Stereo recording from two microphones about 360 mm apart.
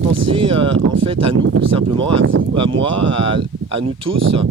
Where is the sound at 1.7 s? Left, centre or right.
Centre.